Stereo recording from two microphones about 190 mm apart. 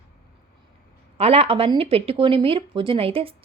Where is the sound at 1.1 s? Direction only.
35° right (ahead or behind).